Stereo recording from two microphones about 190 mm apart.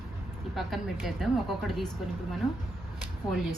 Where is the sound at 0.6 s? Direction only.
Centre (ahead or behind).